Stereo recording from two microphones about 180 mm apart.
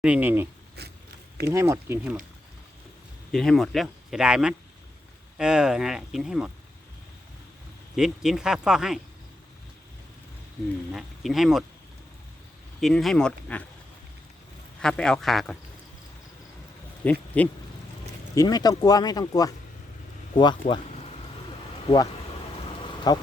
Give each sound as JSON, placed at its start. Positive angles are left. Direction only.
{"t": 0.0, "sound": "speech", "side_deg": -10}
{"t": 0.8, "sound": "biting", "side_deg": -65}
{"t": 1.5, "sound": "speech", "side_deg": -15}
{"t": 3.3, "sound": "speech", "side_deg": 0}
{"t": 7.9, "sound": "speech", "side_deg": 0}
{"t": 10.9, "sound": "speech", "side_deg": 0}
{"t": 12.8, "sound": "speech", "side_deg": 0}
{"t": 14.8, "sound": "speech", "side_deg": 5}
{"t": 17.0, "sound": "a sound", "side_deg": 10}
{"t": 18.3, "sound": "speech", "side_deg": 20}
{"t": 22.8, "sound": "a sound", "side_deg": 20}